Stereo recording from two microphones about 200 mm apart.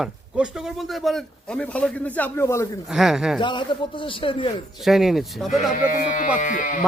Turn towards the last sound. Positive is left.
turn(degrees=40)  # may be behind; listen again after turning